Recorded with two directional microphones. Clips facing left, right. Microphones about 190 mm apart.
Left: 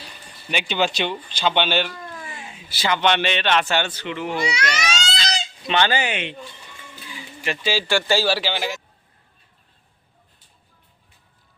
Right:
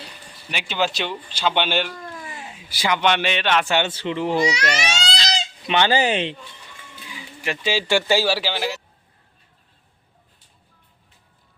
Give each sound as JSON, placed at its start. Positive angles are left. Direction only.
{"t": 0.5, "sound": "a man's voice", "side_deg": -5}
{"t": 5.6, "sound": "a man's voice", "side_deg": -20}
{"t": 5.9, "sound": "speech", "side_deg": -35}
{"t": 7.4, "sound": "speech", "side_deg": -15}